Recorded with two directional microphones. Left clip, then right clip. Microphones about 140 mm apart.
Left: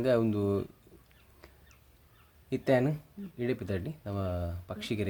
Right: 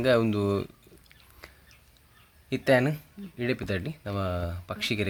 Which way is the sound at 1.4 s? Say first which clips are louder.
Right 8 dB; 20° right (ahead or behind).